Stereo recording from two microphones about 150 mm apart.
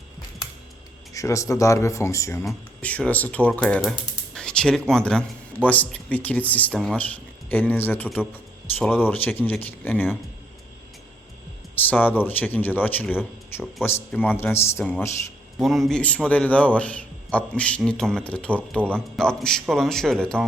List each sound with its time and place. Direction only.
1.1 s speech: 20° left (ahead or behind)
2.4 s a man's voice: 5° left (ahead or behind)
3.8 s a man's voice: centre (ahead or behind)
7.5 s a man's voice: 10° left (ahead or behind)
11.7 s a man's voice: 10° left (ahead or behind)
14.3 s a man's voice: 15° left (ahead or behind)
15.5 s a man's voice: centre (ahead or behind)